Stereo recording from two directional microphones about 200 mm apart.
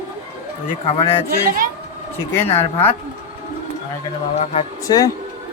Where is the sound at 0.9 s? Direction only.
30° left (ahead or behind).